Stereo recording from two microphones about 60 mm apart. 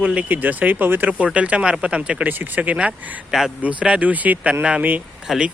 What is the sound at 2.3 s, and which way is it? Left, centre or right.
Speech, right.